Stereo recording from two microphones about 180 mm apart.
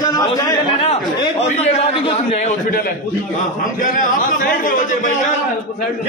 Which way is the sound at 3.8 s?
50° left (ahead or behind).